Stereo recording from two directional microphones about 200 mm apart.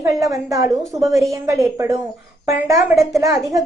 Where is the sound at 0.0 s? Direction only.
15° right (ahead or behind).